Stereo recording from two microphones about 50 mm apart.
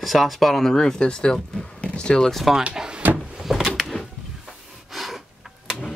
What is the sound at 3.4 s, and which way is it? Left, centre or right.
Door, centre.